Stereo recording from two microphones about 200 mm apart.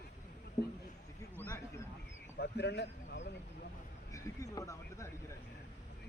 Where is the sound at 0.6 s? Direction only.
35° left (ahead or behind).